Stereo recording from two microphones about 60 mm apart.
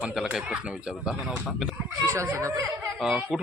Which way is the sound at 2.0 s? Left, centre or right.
Right.